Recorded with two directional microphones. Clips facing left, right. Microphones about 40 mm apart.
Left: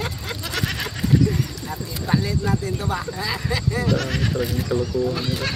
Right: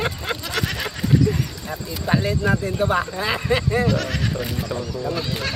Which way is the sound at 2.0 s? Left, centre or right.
Right.